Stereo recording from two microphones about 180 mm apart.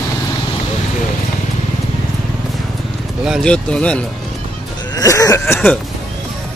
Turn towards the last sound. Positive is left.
turn(degrees=10)  # may be behind; listen again after turning